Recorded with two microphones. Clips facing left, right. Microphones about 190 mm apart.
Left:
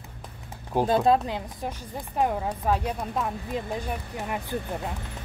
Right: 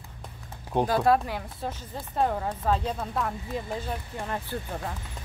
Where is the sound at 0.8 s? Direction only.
20° left (ahead or behind).